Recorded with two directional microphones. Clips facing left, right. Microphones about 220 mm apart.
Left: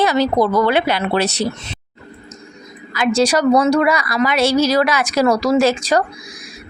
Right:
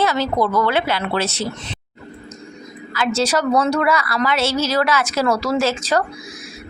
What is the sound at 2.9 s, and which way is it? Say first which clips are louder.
A woman's voice: left 4 dB; 15° left (ahead or behind).